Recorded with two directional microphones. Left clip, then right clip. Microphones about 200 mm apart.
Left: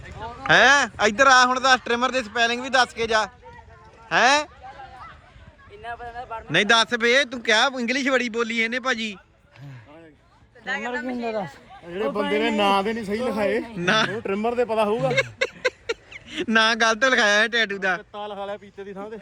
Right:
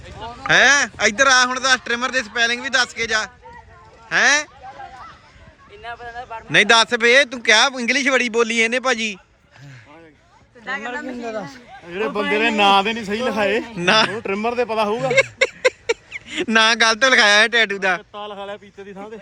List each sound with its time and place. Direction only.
0.3 s speech: centre (ahead or behind)
5.8 s speech: 5° right (ahead or behind)
11.9 s a man's voice: 15° right (ahead or behind)
13.7 s speech: centre (ahead or behind)
14.2 s speech: 15° right (ahead or behind); by 19.2 s 5° left (ahead or behind)